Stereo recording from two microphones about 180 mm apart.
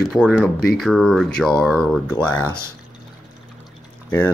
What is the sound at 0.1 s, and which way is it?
Speech, 5° right (ahead or behind).